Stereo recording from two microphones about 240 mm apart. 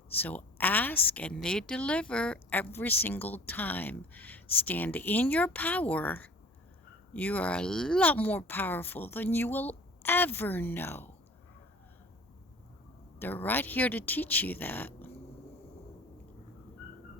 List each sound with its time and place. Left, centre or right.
0.2 s a woman's voice: centre
13.1 s a woman's voice: centre